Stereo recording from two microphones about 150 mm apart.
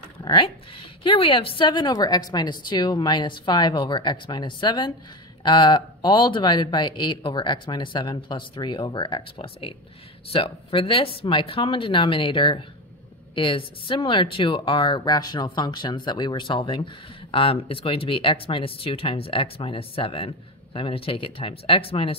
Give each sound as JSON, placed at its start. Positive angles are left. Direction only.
{"t": 0.2, "sound": "speech", "side_deg": 35}